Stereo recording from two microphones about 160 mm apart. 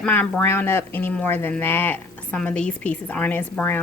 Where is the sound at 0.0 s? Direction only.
10° left (ahead or behind).